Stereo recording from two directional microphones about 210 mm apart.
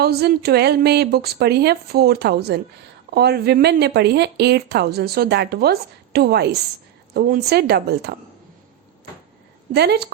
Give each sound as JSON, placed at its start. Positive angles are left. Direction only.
{"t": 0.0, "sound": "speech", "side_deg": -50}
{"t": 9.7, "sound": "speech", "side_deg": -50}